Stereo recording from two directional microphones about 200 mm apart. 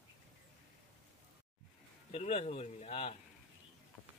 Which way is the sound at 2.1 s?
30° left (ahead or behind).